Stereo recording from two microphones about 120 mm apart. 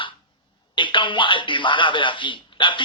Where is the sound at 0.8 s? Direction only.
45° left (ahead or behind).